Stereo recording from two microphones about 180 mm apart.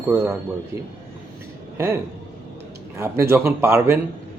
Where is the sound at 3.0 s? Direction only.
15° right (ahead or behind).